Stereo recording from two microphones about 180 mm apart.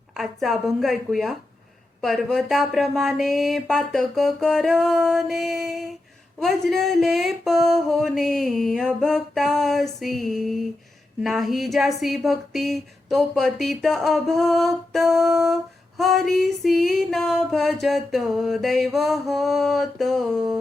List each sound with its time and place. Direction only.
0.2 s music: centre (ahead or behind)